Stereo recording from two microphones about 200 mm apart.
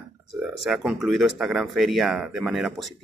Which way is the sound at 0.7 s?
Centre (ahead or behind).